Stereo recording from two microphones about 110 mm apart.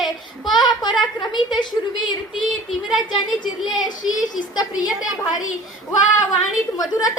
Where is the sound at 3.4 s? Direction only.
40° left (ahead or behind).